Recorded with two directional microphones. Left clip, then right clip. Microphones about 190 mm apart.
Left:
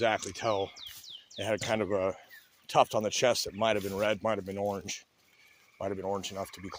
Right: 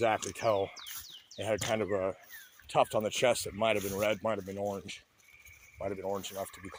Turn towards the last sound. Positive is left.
turn(degrees=20)  # may be behind; listen again after turning